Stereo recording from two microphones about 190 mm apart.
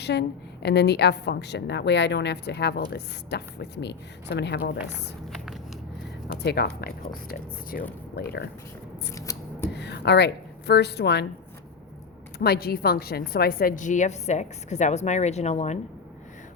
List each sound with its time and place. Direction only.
0.0 s a woman's voice: 60° left (ahead or behind)
6.2 s a woman's voice: 60° left (ahead or behind)
9.1 s scissors: 15° left (ahead or behind)
9.7 s a woman's voice: 60° left (ahead or behind)
12.4 s a woman's voice: 55° left (ahead or behind); by 15.8 s 35° left (ahead or behind)